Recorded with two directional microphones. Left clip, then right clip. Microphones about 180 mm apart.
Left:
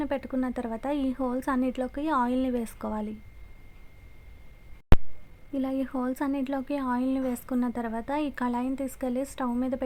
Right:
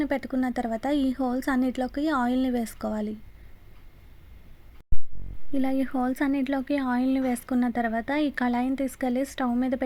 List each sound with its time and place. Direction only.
0.0 s speech: 20° right (ahead or behind)
5.5 s speech: 15° right (ahead or behind)